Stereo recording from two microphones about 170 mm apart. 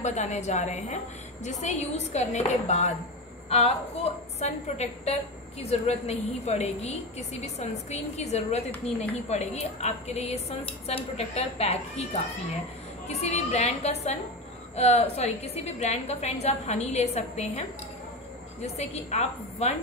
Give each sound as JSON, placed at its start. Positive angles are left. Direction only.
{"t": 0.0, "sound": "a woman's voice", "side_deg": 40}